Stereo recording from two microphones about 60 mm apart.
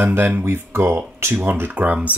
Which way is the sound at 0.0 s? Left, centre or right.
Right.